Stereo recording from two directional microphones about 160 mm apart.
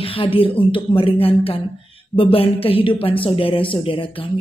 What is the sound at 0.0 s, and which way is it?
A woman's voice, 35° left (ahead or behind).